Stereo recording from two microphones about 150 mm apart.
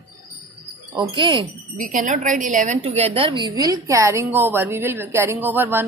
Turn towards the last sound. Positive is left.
turn(degrees=-15)  # may be behind; listen again after turning